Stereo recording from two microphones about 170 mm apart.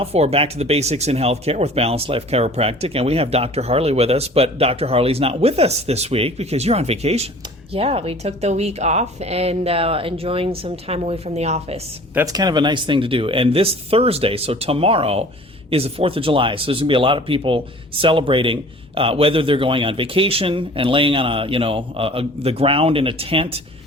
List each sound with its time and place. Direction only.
0.0 s speech: 35° right (ahead or behind)
12.1 s speech: 20° right (ahead or behind)